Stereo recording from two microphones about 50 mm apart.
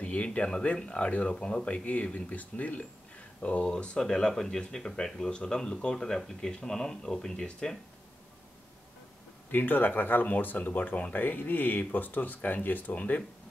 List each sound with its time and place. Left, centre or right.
0.0 s speech: left
3.6 s speech: centre
9.5 s speech: left